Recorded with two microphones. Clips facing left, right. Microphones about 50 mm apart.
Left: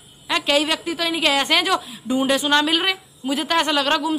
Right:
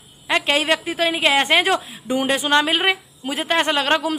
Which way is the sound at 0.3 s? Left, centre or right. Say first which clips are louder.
Right 1 dB; right.